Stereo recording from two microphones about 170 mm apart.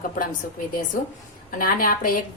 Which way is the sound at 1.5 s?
55° left (ahead or behind).